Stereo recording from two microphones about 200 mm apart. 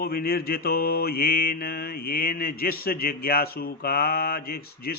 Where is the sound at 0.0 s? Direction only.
50° left (ahead or behind).